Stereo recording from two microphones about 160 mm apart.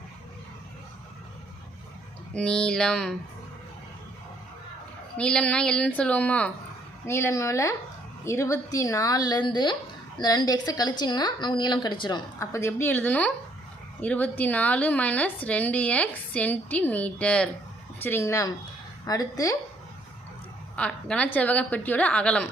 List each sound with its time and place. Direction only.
2.3 s speech: 5° left (ahead or behind)
5.1 s a woman's voice: 5° left (ahead or behind)
20.7 s a woman's voice: 10° left (ahead or behind)